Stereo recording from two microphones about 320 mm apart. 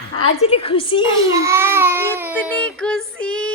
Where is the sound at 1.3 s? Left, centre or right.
Centre.